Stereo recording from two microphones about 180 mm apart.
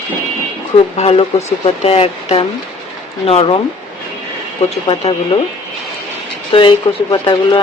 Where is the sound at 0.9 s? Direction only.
35° left (ahead or behind).